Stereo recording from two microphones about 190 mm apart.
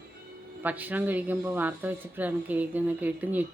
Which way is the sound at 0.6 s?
10° right (ahead or behind).